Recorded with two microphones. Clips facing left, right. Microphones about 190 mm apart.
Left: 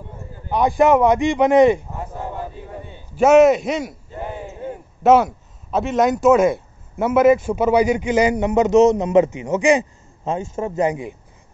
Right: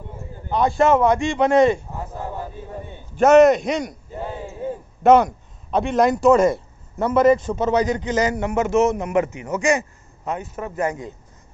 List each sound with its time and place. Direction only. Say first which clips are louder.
0.5 s speech: left 2 dB; 15° left (ahead or behind)
3.2 s a man's voice: even; 5° left (ahead or behind)
5.0 s speech: even; 5° left (ahead or behind)
10.2 s a man's voice: left 4 dB; 25° left (ahead or behind)